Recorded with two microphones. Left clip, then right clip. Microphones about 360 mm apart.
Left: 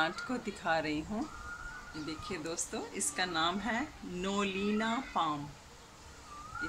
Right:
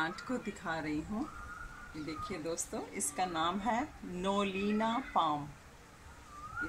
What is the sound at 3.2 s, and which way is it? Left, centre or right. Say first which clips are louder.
Speech: left 1 dB; centre.